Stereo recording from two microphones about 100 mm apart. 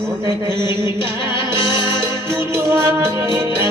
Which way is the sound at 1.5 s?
50° left (ahead or behind).